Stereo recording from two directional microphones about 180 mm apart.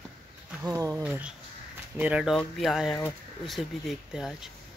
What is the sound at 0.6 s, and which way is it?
Speech, 20° right (ahead or behind).